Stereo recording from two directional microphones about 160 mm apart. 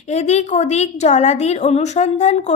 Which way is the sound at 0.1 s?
45° left (ahead or behind).